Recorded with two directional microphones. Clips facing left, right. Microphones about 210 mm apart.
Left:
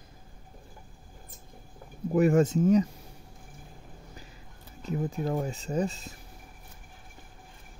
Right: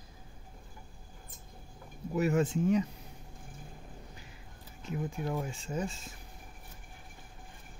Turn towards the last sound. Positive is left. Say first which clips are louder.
# left 6 dB
turn(degrees=35)  # may be behind; listen again after turning